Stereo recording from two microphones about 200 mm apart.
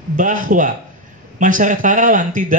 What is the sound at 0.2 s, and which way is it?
A man's voice, 40° right (ahead or behind).